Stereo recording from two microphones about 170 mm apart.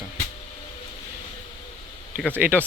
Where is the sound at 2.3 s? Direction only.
10° right (ahead or behind).